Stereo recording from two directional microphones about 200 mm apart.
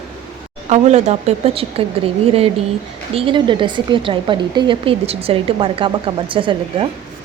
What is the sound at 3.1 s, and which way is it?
A woman's voice, 25° right (ahead or behind).